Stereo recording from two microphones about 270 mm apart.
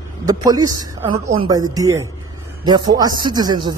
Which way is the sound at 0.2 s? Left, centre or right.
Centre.